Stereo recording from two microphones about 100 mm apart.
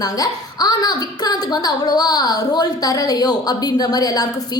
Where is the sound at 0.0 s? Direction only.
40° left (ahead or behind).